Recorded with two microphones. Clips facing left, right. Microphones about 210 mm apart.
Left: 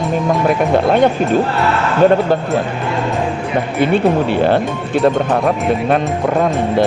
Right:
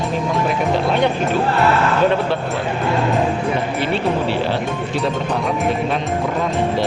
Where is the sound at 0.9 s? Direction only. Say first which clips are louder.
Left 6 dB; 50° left (ahead or behind).